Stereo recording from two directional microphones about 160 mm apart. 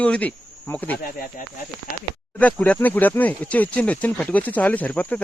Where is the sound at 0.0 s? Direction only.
10° left (ahead or behind).